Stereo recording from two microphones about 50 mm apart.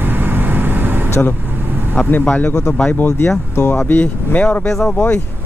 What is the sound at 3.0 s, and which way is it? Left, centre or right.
Speech, left.